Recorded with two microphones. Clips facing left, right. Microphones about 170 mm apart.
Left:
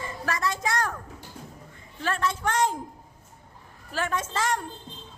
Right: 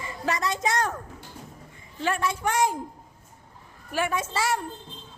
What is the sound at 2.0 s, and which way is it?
Speech, 10° right (ahead or behind).